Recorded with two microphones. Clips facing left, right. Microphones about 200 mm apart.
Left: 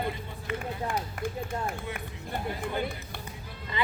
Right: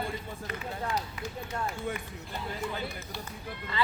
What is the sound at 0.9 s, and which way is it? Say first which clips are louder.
Speech: left 2 dB; 50° left (ahead or behind).